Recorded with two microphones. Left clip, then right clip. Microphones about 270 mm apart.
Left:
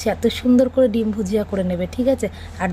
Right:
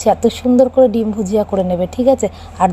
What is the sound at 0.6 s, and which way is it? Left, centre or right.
A woman's voice, centre.